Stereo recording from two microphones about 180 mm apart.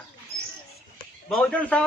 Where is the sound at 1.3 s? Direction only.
5° left (ahead or behind).